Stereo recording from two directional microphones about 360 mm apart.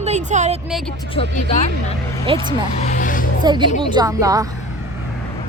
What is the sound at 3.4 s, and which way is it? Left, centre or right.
Speech, centre.